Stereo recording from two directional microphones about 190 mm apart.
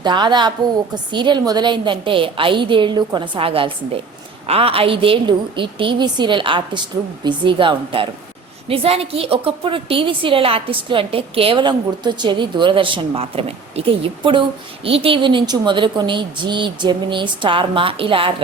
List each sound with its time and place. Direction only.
0.0 s a woman's voice: 25° right (ahead or behind)